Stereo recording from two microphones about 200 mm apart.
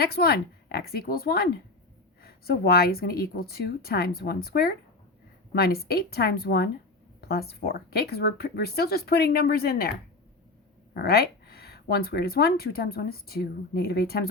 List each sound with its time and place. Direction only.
0.0 s speech: 50° left (ahead or behind)
10.9 s speech: 50° left (ahead or behind)